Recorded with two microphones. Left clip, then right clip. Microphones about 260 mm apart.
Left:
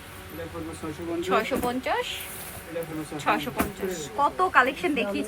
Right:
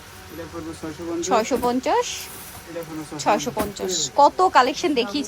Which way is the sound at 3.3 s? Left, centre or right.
Centre.